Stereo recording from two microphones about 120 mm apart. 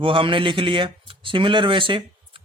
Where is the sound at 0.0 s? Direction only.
45° right (ahead or behind).